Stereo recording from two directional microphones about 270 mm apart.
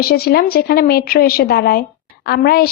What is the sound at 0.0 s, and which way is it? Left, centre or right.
A woman's voice, left.